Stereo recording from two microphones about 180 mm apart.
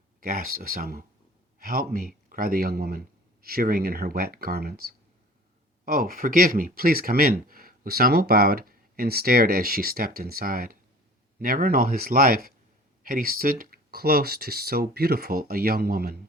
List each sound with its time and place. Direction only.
0.2 s speech: 50° right (ahead or behind)